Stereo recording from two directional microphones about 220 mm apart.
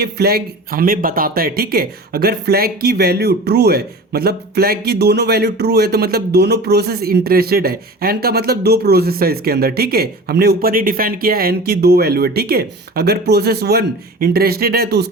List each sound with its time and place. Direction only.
0.0 s speech: 45° right (ahead or behind)